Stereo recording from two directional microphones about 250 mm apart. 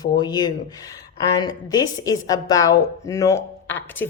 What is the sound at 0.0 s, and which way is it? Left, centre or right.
Speech, centre.